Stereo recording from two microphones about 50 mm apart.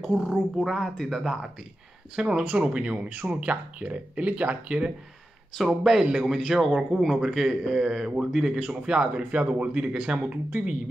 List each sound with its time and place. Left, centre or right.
0.0 s a man's voice: centre
0.6 s speech: centre
2.1 s a man's voice: centre
2.4 s speech: right
5.9 s a man's voice: centre; by 10.8 s right